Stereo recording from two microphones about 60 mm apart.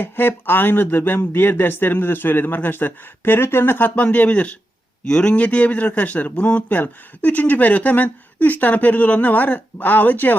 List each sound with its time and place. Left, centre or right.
0.0 s a man's voice: left